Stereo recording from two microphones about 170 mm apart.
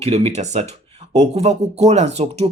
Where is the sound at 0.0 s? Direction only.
35° right (ahead or behind).